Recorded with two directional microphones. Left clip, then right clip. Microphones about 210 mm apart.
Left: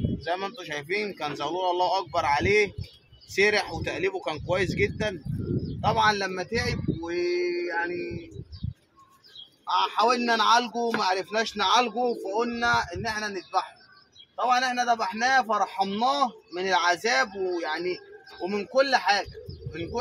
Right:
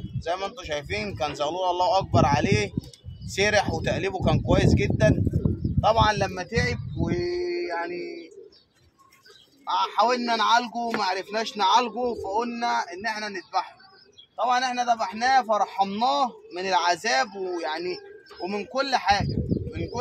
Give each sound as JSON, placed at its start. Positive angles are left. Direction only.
{"t": 0.2, "sound": "speech", "side_deg": -30}
{"t": 7.1, "sound": "music", "side_deg": -25}
{"t": 9.7, "sound": "a man's voice", "side_deg": -10}